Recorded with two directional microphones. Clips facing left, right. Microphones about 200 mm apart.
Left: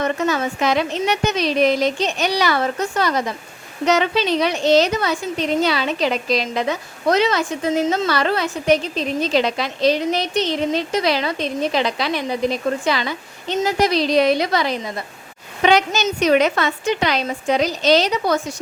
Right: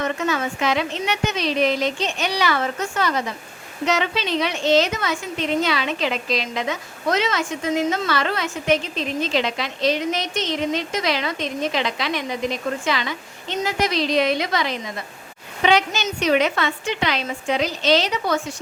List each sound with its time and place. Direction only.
0.0 s a woman's voice: 40° left (ahead or behind)